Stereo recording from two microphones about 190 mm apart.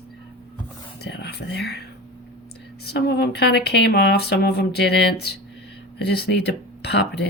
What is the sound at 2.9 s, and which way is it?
Speech, 60° left (ahead or behind).